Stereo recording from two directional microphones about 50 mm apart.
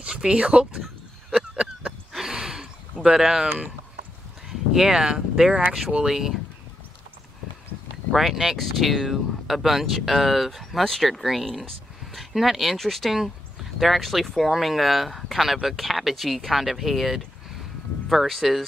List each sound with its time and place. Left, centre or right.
0.0 s speech: centre
1.3 s a sound: right
3.2 s speech: centre
4.5 s speech: centre
8.1 s speech: centre